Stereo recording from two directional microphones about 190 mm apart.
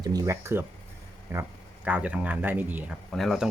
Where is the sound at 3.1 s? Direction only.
Centre (ahead or behind).